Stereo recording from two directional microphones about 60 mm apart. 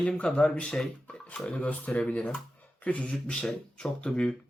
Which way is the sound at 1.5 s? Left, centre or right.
Left.